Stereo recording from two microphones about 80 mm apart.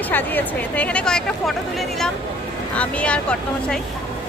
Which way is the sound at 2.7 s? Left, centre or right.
Centre.